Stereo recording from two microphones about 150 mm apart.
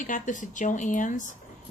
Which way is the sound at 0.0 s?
60° left (ahead or behind).